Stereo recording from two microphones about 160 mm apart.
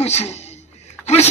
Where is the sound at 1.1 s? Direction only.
45° left (ahead or behind).